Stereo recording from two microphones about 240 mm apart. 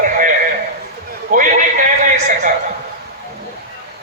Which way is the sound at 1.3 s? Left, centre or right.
Right.